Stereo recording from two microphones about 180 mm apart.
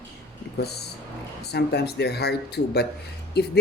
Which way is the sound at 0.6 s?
65° left (ahead or behind).